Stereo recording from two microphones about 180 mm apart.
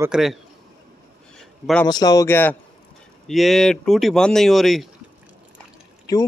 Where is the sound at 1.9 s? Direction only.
20° left (ahead or behind).